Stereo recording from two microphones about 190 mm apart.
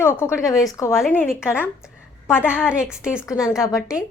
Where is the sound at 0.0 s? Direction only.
15° left (ahead or behind).